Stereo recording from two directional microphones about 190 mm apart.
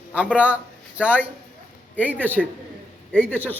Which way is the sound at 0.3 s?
5° right (ahead or behind).